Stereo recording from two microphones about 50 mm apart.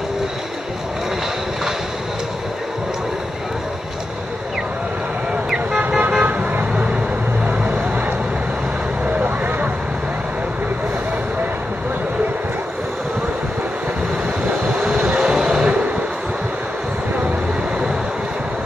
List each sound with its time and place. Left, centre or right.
5.8 s car: right
6.7 s vehicle: right
9.0 s vehicle: right
14.8 s vehicle: centre